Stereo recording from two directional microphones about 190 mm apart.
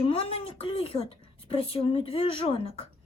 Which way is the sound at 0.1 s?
30° left (ahead or behind).